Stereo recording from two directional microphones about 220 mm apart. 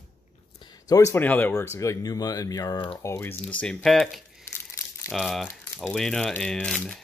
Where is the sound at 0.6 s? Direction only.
15° left (ahead or behind).